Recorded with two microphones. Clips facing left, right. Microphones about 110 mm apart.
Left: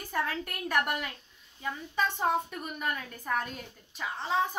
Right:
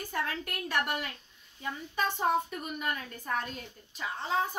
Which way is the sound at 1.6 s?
5° right (ahead or behind).